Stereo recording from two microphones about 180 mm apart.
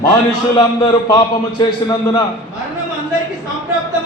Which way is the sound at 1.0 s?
25° left (ahead or behind).